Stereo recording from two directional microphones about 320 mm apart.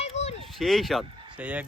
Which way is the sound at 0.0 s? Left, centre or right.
Centre.